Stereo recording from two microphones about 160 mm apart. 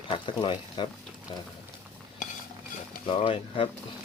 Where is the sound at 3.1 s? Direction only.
35° left (ahead or behind).